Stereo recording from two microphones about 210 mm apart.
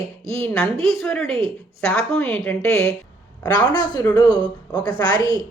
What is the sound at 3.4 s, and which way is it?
Speech, 20° left (ahead or behind).